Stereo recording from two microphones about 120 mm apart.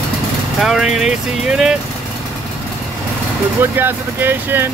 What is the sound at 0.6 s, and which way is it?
Speech, 5° right (ahead or behind).